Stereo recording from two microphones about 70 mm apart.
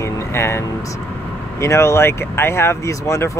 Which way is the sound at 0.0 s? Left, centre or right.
Left.